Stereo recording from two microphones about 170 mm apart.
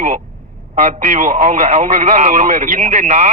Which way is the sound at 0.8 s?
45° right (ahead or behind).